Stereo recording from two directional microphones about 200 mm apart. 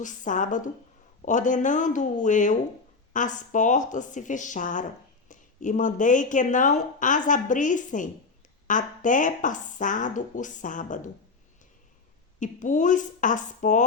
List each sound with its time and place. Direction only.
0.0 s a woman's voice: 40° left (ahead or behind)
12.4 s a woman's voice: 40° left (ahead or behind)